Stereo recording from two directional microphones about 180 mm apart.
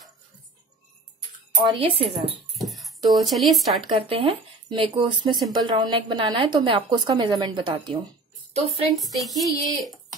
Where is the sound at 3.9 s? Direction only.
30° right (ahead or behind).